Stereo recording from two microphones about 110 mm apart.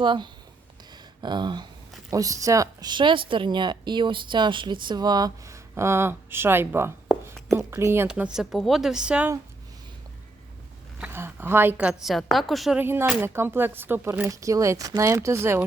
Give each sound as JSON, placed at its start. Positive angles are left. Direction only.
{"t": 0.0, "sound": "speech", "side_deg": -45}
{"t": 2.0, "sound": "speech", "side_deg": -30}
{"t": 2.9, "sound": "speech", "side_deg": -45}
{"t": 8.0, "sound": "a woman's voice", "side_deg": -10}
{"t": 11.0, "sound": "a woman's voice", "side_deg": -20}
{"t": 12.0, "sound": "a woman's voice", "side_deg": 0}
{"t": 12.7, "sound": "speech", "side_deg": -20}